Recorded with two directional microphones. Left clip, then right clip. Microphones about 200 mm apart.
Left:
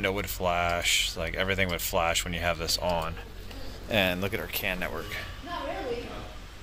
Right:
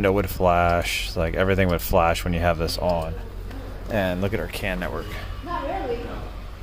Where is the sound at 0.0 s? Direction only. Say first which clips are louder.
Right 8 dB; 25° right (ahead or behind).